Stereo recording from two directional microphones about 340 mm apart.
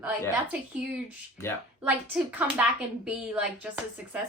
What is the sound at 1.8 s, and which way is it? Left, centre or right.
Speech, centre.